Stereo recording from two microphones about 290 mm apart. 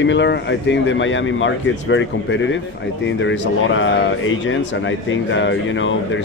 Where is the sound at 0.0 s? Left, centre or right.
Left.